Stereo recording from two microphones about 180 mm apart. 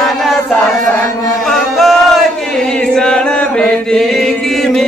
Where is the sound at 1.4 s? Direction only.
Centre (ahead or behind).